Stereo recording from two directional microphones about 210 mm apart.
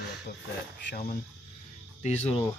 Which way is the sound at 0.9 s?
40° left (ahead or behind).